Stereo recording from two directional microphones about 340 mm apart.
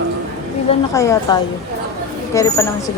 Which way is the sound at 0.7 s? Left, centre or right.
Centre.